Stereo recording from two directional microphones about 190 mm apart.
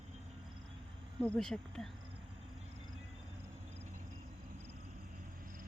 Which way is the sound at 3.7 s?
40° right (ahead or behind).